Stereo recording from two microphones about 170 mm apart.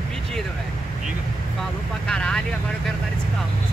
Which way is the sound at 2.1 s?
5° left (ahead or behind).